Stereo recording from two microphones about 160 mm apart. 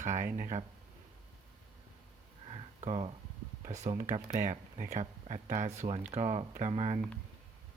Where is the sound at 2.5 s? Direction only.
40° right (ahead or behind).